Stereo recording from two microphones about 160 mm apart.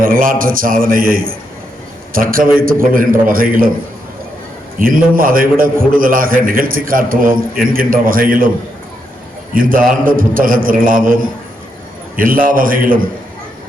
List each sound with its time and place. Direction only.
0.0 s a man's voice: 60° right (ahead or behind)
4.8 s a man's voice: 60° right (ahead or behind)
9.6 s a man's voice: 60° right (ahead or behind)